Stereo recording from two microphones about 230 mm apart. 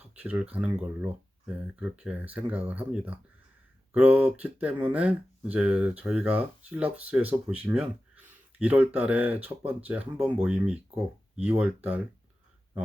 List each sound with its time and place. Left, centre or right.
0.2 s speech: centre